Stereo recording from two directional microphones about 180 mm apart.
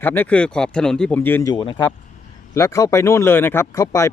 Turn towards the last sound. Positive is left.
turn(degrees=15)  # may be behind; listen again after turning